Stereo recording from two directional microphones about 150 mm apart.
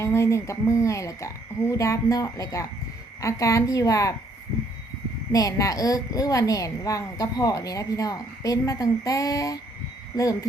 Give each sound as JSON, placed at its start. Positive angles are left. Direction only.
{"t": 0.0, "sound": "a woman's voice", "side_deg": 20}
{"t": 5.3, "sound": "a woman's voice", "side_deg": 25}